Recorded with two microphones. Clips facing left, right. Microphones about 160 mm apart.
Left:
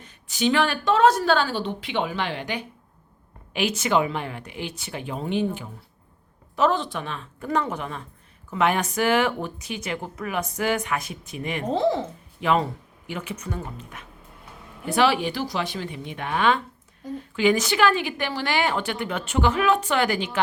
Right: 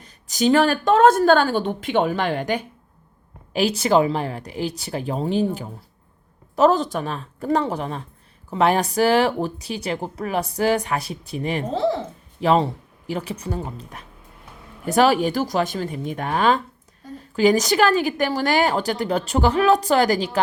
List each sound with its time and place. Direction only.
0.0 s a woman's voice: 40° right (ahead or behind)
3.5 s a woman's voice: 35° right (ahead or behind)